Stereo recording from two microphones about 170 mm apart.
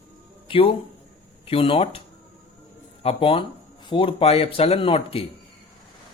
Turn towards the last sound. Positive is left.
turn(degrees=35)  # may be behind; listen again after turning